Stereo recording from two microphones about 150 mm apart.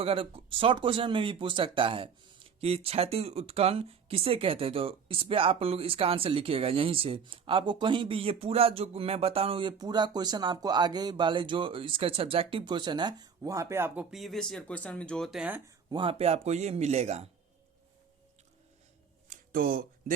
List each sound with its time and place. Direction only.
0.0 s speech: 40° right (ahead or behind); by 15.7 s 10° right (ahead or behind)
15.9 s a man's voice: 35° right (ahead or behind)
19.3 s a sound: 70° right (ahead or behind)